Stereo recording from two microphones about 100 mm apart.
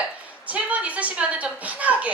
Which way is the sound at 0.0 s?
15° right (ahead or behind).